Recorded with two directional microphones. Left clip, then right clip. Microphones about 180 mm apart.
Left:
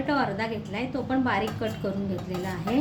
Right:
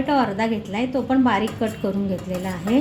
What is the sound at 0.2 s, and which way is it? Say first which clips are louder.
A woman's voice: right 6 dB; 45° right (ahead or behind).